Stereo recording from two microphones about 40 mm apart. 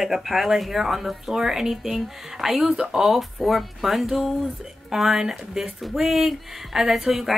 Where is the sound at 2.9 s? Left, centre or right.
Centre.